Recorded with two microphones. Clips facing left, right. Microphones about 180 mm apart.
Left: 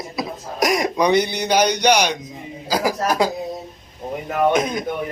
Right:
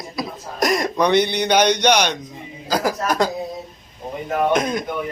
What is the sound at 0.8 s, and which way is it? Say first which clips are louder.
Speech: right 1 dB; 10° left (ahead or behind).